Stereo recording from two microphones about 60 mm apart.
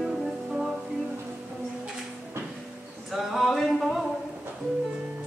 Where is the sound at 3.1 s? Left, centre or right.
Centre.